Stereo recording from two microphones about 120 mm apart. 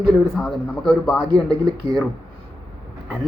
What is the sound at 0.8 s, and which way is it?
A man's voice, centre (ahead or behind).